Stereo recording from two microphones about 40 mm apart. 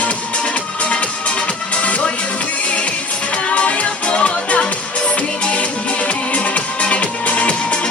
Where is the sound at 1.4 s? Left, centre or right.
Left.